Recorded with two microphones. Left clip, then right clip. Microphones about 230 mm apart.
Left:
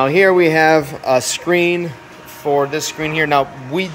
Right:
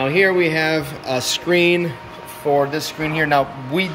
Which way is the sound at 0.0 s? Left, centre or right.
Centre.